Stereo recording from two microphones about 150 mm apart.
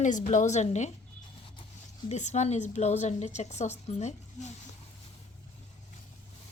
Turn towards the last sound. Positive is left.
turn(degrees=50)  # may be behind; listen again after turning